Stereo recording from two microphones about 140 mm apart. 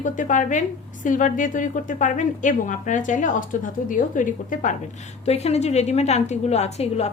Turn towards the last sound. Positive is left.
turn(degrees=50)  # may be behind; listen again after turning